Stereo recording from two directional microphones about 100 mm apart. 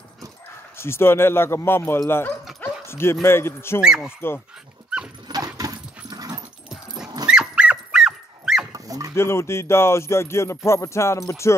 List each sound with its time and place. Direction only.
0.7 s speech: 25° left (ahead or behind)
3.8 s speech: 5° right (ahead or behind)
5.6 s dog: 40° right (ahead or behind)
7.2 s dog: 10° right (ahead or behind)
8.7 s dog: 35° right (ahead or behind)
9.1 s speech: 25° left (ahead or behind)